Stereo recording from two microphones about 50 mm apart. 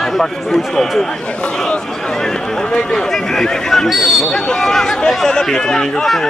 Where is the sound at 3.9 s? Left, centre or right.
Centre.